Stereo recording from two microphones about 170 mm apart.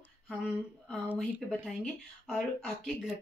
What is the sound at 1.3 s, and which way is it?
Speech, centre (ahead or behind).